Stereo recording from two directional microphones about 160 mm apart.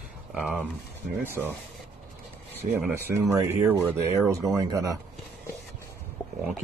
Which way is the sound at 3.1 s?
15° right (ahead or behind).